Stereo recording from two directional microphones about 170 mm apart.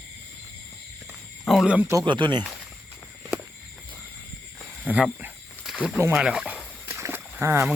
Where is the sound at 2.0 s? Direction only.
30° right (ahead or behind).